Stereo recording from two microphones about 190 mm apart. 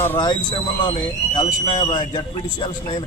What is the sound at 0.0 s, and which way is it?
Speech, 15° left (ahead or behind).